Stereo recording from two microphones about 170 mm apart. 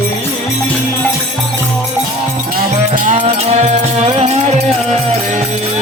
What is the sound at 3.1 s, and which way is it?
Music, 35° right (ahead or behind).